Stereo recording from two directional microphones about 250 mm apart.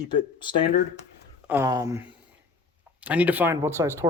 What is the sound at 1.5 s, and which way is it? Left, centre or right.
Speech, centre.